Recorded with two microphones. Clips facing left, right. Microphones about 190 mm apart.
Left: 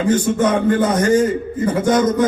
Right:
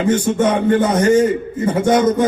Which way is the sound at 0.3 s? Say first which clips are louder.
Right 1 dB; 25° right (ahead or behind).